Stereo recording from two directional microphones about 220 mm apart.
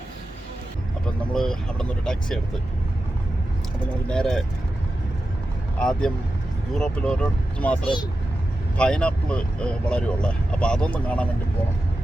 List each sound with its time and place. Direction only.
1.3 s speech: 5° left (ahead or behind)
4.0 s speech: 5° left (ahead or behind)
5.8 s speech: 5° left (ahead or behind)